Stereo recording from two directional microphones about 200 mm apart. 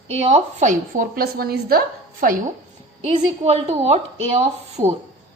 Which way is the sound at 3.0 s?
30° right (ahead or behind).